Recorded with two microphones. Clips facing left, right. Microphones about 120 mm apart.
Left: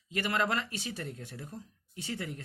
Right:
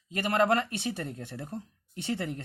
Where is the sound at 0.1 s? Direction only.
45° right (ahead or behind).